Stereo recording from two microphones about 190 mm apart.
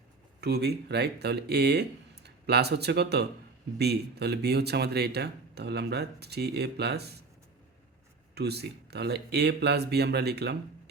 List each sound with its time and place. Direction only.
0.4 s speech: 60° right (ahead or behind)
8.4 s speech: 60° right (ahead or behind)